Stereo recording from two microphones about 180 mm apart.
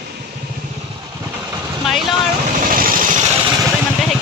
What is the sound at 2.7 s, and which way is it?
Vehicle, 50° right (ahead or behind).